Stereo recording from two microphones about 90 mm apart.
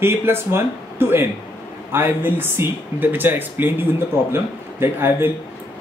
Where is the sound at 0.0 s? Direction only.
25° right (ahead or behind).